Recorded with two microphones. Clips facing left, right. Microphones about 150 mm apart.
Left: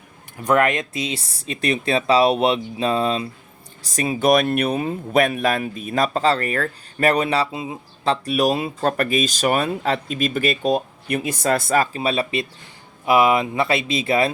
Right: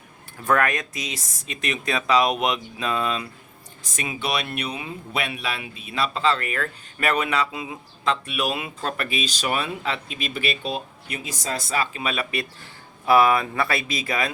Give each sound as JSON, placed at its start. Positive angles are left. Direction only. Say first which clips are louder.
{"t": 0.4, "sound": "speech", "louder": "left 4 dB", "side_deg": 20}